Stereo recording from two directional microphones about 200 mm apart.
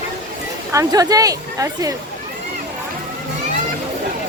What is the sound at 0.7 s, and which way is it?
Speech, 15° right (ahead or behind).